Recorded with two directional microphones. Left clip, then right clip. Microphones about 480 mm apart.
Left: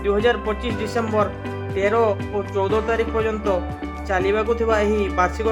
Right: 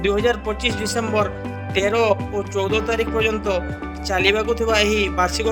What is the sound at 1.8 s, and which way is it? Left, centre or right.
Speech, centre.